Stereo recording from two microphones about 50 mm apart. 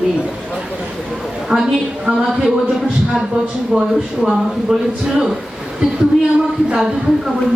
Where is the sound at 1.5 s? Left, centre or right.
Right.